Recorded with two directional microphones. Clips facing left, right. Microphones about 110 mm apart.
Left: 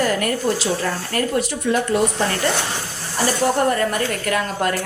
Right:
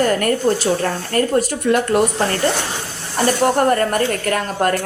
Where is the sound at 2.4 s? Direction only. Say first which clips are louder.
Right 2 dB; centre (ahead or behind).